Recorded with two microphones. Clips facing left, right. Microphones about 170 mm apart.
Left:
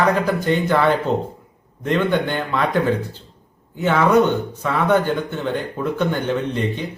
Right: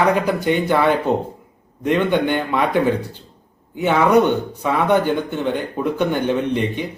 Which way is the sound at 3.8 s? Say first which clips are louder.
Right 1 dB; 15° right (ahead or behind).